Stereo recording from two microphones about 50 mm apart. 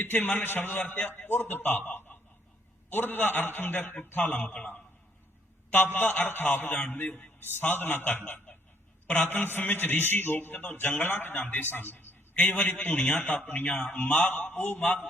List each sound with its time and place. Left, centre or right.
0.0 s a man's voice: left
4.4 s a man's voice: left
5.7 s a man's voice: left
12.4 s a man's voice: left
12.9 s a man's voice: left
13.7 s a man's voice: left
13.9 s a man's voice: left